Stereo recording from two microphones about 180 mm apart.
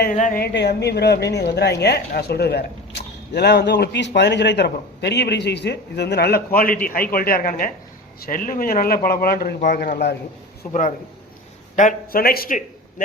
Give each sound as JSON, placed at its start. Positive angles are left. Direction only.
{"t": 0.0, "sound": "speech", "side_deg": 45}
{"t": 10.7, "sound": "speech", "side_deg": 45}